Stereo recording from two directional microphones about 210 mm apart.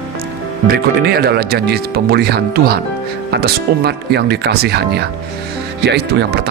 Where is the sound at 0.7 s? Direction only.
50° right (ahead or behind).